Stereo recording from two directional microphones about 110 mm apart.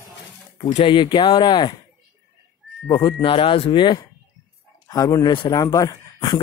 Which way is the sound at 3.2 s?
55° left (ahead or behind).